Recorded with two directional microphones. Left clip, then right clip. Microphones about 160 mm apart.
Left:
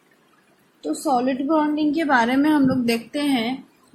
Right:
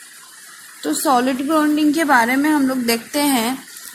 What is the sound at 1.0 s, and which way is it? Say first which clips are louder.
Speech: right 4 dB; 50° right (ahead or behind).